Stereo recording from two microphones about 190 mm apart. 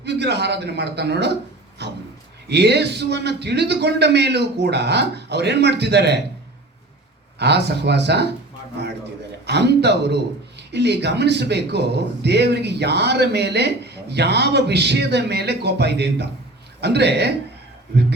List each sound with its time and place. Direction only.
0.0 s a man's voice: 60° right (ahead or behind)
7.3 s a man's voice: 60° right (ahead or behind)
9.5 s a man's voice: 60° right (ahead or behind)